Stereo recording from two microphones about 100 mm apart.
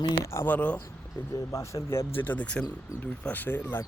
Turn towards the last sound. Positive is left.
turn(degrees=25)  # may be behind; listen again after turning